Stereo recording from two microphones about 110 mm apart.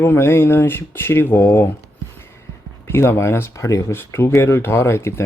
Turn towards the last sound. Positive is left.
turn(degrees=25)  # may be behind; listen again after turning